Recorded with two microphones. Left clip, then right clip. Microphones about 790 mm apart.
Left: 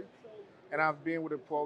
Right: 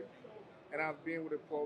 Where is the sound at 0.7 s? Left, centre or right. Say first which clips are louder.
Left 7 dB; left.